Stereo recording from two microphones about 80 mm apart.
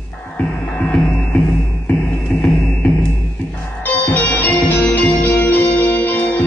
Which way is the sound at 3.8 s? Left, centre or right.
Left.